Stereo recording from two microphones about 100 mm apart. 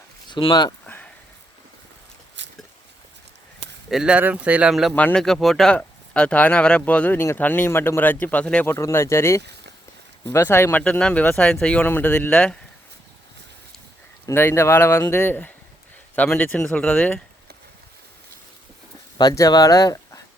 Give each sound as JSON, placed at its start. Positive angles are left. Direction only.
{"t": 0.3, "sound": "speech", "side_deg": 50}
{"t": 0.9, "sound": "a sound", "side_deg": 15}
{"t": 3.8, "sound": "speech", "side_deg": -5}
{"t": 4.7, "sound": "speech", "side_deg": 0}
{"t": 4.9, "sound": "speech", "side_deg": 15}
{"t": 5.2, "sound": "speech", "side_deg": 5}
{"t": 8.6, "sound": "speech", "side_deg": 25}
{"t": 14.3, "sound": "speech", "side_deg": 25}
{"t": 19.1, "sound": "speech", "side_deg": 35}